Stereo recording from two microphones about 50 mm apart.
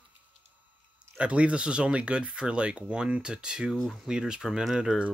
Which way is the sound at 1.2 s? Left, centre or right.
Right.